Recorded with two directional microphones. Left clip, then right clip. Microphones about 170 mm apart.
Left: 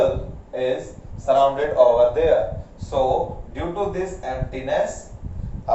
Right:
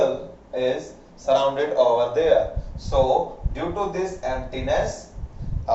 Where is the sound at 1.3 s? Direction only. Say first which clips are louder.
Left 2 dB; 5° left (ahead or behind).